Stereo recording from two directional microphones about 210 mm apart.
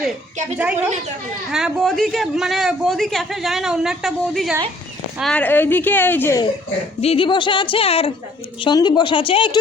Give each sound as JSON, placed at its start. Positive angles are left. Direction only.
{"t": 0.5, "sound": "a woman's voice", "side_deg": -5}
{"t": 7.0, "sound": "speech", "side_deg": 25}